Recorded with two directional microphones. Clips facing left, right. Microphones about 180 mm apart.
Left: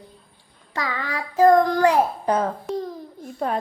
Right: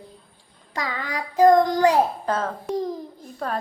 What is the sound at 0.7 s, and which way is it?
Child singing, 15° right (ahead or behind).